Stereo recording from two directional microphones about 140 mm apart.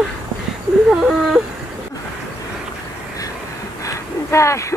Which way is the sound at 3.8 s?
20° left (ahead or behind).